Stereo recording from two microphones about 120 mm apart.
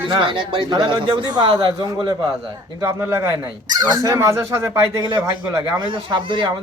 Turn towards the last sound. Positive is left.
turn(degrees=-40)  # may be behind; listen again after turning